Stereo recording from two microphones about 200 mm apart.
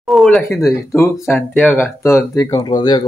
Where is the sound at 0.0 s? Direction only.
Centre (ahead or behind).